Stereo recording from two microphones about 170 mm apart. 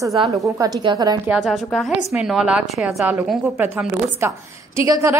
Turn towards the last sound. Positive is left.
turn(degrees=-20)  # may be behind; listen again after turning